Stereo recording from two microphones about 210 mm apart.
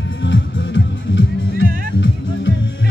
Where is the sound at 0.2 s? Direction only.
60° left (ahead or behind).